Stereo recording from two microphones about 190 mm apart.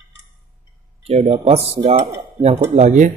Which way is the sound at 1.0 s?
35° right (ahead or behind).